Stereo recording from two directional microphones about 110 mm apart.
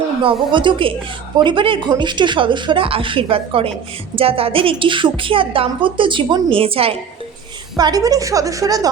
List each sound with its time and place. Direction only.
0.2 s a woman's voice: 50° right (ahead or behind)
7.8 s a woman's voice: 35° right (ahead or behind)